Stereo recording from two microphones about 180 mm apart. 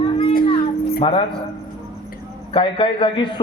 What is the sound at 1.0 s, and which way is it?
Speech, 30° left (ahead or behind).